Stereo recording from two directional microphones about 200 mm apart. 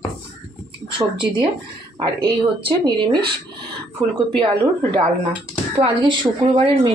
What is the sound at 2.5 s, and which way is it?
A woman's voice, 25° right (ahead or behind).